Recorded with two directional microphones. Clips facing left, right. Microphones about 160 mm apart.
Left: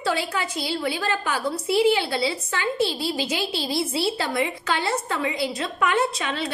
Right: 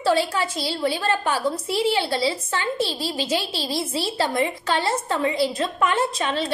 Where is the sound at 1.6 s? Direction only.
10° left (ahead or behind).